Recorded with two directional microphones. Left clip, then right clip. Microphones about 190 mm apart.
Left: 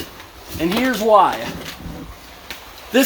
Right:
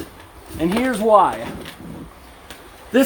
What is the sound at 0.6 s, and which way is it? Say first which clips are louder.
Speech: left 1 dB; 15° right (ahead or behind).